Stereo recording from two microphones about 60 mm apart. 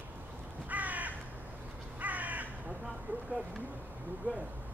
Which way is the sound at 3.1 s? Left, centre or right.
Right.